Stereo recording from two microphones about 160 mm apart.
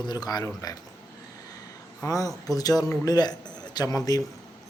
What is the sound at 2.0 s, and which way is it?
Speech, 20° left (ahead or behind).